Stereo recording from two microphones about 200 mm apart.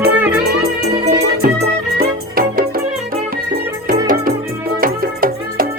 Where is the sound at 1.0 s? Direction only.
45° right (ahead or behind).